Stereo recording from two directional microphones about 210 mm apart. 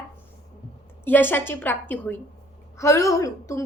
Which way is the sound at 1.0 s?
10° left (ahead or behind).